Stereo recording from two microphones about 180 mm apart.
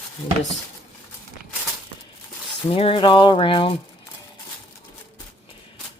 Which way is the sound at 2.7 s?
30° left (ahead or behind).